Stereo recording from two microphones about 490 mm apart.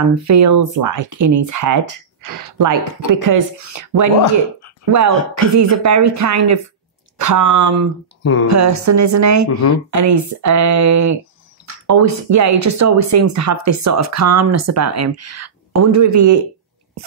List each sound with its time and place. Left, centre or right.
0.1 s speech: right
8.2 s speech: left
8.5 s speech: right